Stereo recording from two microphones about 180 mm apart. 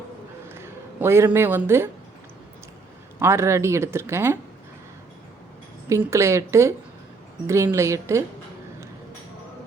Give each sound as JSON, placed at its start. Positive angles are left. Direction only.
{"t": 0.4, "sound": "a sound", "side_deg": -15}
{"t": 3.2, "sound": "speech", "side_deg": -15}
{"t": 5.9, "sound": "speech", "side_deg": -15}